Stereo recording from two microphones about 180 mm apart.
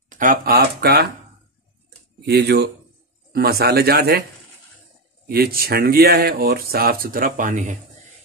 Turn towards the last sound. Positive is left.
turn(degrees=-45)  # may be behind; listen again after turning